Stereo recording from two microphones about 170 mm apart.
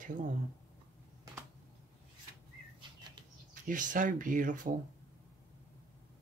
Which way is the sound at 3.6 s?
50° right (ahead or behind).